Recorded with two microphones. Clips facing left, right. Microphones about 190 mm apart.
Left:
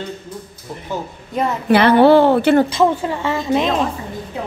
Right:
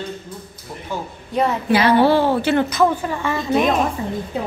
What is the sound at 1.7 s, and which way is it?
Speech, 60° left (ahead or behind).